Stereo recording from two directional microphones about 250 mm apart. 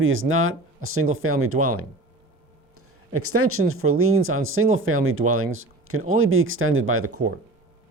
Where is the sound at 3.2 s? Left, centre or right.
Right.